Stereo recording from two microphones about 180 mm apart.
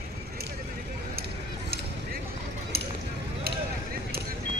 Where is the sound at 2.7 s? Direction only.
60° right (ahead or behind).